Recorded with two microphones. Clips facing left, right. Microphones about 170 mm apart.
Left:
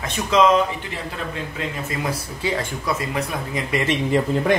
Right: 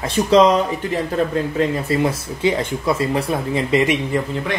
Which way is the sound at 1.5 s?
30° right (ahead or behind).